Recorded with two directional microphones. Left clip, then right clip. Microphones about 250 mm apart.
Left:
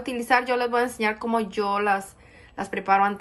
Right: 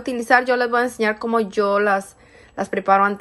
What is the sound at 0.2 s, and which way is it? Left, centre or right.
A woman's voice, centre.